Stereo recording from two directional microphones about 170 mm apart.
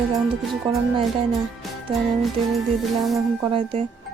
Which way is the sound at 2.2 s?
Centre (ahead or behind).